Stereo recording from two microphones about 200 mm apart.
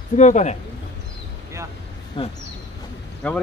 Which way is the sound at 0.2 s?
35° left (ahead or behind).